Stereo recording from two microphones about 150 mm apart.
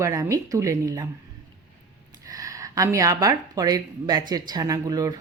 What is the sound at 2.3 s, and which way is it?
A woman's voice, 20° right (ahead or behind).